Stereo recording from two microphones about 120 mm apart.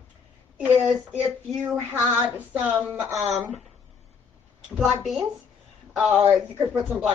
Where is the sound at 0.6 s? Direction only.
10° right (ahead or behind).